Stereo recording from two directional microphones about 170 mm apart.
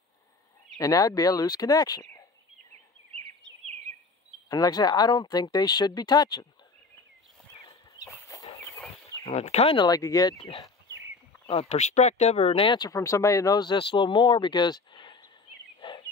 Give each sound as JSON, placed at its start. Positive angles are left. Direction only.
{"t": 0.7, "sound": "speech", "side_deg": 20}
{"t": 3.4, "sound": "bird vocalization", "side_deg": -90}
{"t": 4.5, "sound": "speech", "side_deg": 25}
{"t": 7.6, "sound": "chicken", "side_deg": 20}
{"t": 9.2, "sound": "speech", "side_deg": 40}
{"t": 11.7, "sound": "speech", "side_deg": 40}
{"t": 15.8, "sound": "a sound", "side_deg": 30}